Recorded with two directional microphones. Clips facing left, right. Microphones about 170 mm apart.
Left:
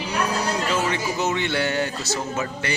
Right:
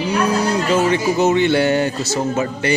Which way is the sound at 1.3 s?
20° right (ahead or behind).